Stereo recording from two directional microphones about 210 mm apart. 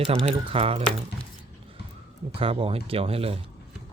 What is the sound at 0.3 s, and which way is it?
Speech, 25° right (ahead or behind).